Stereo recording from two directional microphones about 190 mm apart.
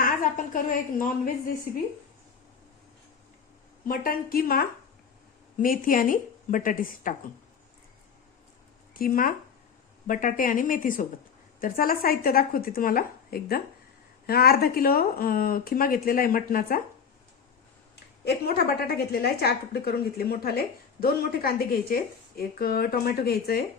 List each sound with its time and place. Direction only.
0.0 s a woman's voice: 45° left (ahead or behind)
3.8 s a woman's voice: 50° left (ahead or behind)
8.9 s a woman's voice: 50° left (ahead or behind)
17.9 s a woman's voice: 60° left (ahead or behind)